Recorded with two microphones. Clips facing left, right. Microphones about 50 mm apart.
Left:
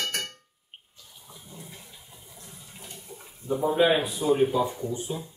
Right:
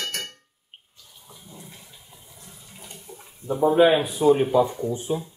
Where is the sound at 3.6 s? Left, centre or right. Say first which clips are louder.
Right 6 dB; centre.